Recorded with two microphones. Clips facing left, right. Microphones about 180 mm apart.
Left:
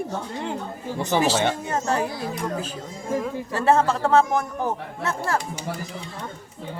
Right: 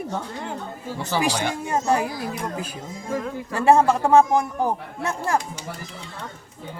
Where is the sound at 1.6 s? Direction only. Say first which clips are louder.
Right 2 dB; 10° right (ahead or behind).